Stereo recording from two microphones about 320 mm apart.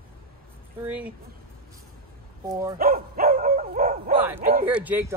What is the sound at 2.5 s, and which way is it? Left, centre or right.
Speech, centre.